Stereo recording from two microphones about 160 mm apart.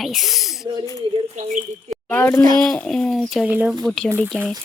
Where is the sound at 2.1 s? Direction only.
15° left (ahead or behind).